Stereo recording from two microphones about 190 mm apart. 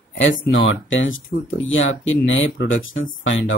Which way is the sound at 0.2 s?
90° left.